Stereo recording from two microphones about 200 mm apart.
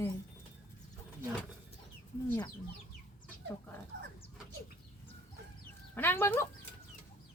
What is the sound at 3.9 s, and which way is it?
Dog, 65° right (ahead or behind).